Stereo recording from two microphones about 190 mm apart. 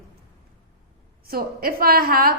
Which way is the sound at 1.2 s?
50° right (ahead or behind).